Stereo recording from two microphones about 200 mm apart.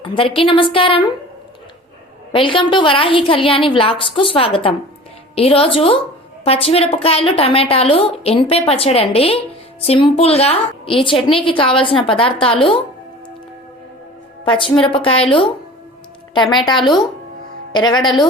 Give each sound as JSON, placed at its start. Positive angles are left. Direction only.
{"t": 0.0, "sound": "a woman's voice", "side_deg": 25}
{"t": 2.3, "sound": "a woman's voice", "side_deg": 25}
{"t": 14.4, "sound": "a woman's voice", "side_deg": 25}
{"t": 17.7, "sound": "a woman's voice", "side_deg": 20}